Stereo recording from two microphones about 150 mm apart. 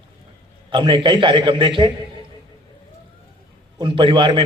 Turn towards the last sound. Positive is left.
turn(degrees=-30)  # may be behind; listen again after turning